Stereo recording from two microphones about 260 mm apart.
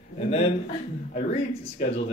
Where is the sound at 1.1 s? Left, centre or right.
Left.